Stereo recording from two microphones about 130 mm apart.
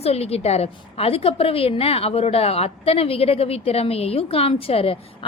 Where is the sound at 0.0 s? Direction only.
50° left (ahead or behind).